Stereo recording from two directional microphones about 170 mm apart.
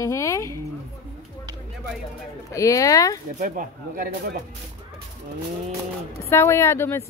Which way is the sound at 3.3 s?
55° right (ahead or behind).